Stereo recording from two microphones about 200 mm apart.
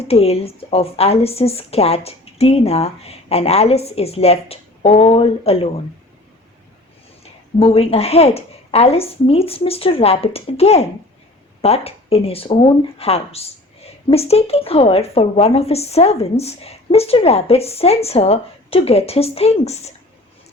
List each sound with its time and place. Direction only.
0.0 s speech: 30° left (ahead or behind)
7.6 s a woman's voice: 30° left (ahead or behind)